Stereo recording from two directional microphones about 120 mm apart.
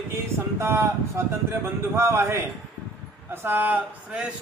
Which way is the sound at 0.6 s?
20° right (ahead or behind).